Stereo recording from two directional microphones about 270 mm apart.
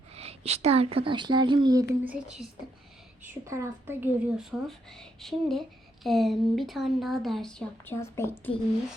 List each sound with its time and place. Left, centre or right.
0.1 s a woman's voice: right
3.4 s speech: centre